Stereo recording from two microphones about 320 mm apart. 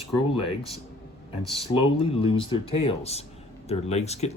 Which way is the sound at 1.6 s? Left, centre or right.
Centre.